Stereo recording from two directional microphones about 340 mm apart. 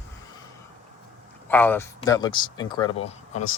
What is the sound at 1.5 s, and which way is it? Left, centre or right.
Speech, centre.